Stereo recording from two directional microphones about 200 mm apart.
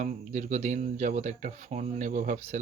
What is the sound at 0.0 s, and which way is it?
Speech, 40° right (ahead or behind).